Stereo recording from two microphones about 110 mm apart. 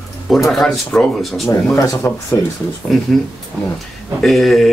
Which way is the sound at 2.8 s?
5° left (ahead or behind).